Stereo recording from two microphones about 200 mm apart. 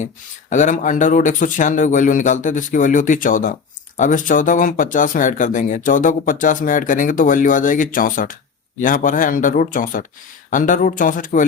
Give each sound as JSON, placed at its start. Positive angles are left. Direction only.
{"t": 0.5, "sound": "speech", "side_deg": 40}